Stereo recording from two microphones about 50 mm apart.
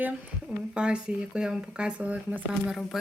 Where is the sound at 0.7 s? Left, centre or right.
Right.